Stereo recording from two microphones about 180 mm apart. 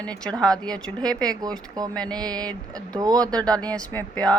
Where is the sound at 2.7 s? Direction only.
20° right (ahead or behind).